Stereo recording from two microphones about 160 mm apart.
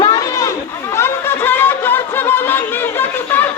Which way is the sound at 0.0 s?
20° left (ahead or behind).